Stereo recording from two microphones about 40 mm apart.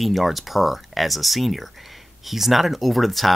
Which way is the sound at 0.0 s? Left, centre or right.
Centre.